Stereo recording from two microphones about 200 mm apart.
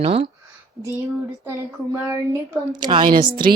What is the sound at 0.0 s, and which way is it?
Speech, 30° right (ahead or behind).